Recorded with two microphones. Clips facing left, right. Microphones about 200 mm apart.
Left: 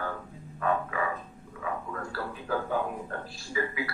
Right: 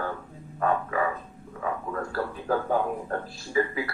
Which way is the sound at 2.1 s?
45° right (ahead or behind).